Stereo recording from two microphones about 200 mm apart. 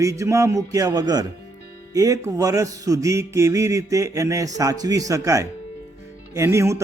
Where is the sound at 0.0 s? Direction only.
15° right (ahead or behind).